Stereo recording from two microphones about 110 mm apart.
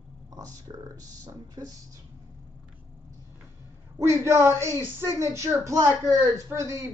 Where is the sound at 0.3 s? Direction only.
35° right (ahead or behind).